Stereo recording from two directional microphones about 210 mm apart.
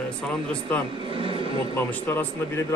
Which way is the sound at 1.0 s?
25° right (ahead or behind).